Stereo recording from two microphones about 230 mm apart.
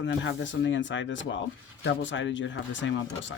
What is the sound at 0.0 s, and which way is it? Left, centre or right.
Speech, left.